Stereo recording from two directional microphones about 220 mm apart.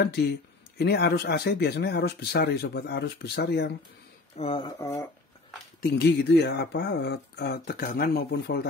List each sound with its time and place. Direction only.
0.0 s speech: 50° left (ahead or behind)
4.4 s speech: 25° left (ahead or behind)
5.8 s speech: 45° left (ahead or behind)